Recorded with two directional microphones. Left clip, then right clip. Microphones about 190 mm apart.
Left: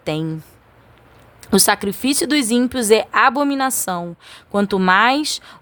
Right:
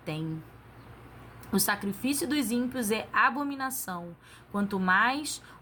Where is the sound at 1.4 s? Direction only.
50° left (ahead or behind).